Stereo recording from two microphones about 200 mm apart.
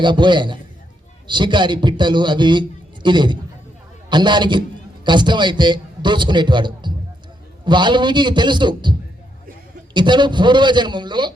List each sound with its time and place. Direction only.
0.0 s a man's voice: 25° right (ahead or behind)